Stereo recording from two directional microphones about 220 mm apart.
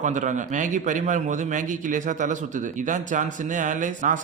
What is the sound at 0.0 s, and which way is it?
Speech, 35° right (ahead or behind).